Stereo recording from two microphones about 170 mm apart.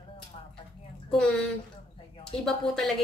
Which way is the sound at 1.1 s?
5° left (ahead or behind).